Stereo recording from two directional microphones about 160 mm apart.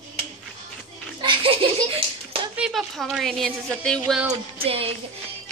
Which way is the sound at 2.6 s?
Centre (ahead or behind).